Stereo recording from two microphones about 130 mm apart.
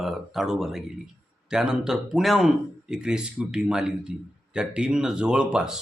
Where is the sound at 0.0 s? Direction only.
Centre (ahead or behind).